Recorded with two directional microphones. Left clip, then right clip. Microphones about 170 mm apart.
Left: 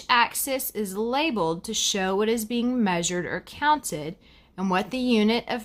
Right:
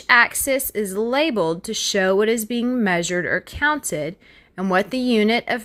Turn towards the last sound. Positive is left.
turn(degrees=-25)  # may be behind; listen again after turning